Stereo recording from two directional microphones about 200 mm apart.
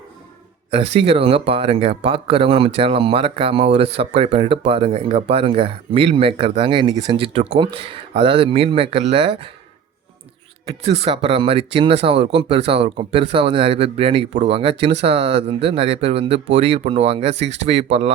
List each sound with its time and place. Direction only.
0.7 s speech: 25° right (ahead or behind)
10.7 s speech: 30° right (ahead or behind)